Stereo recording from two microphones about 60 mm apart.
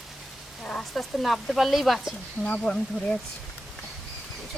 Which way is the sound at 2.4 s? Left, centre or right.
Left.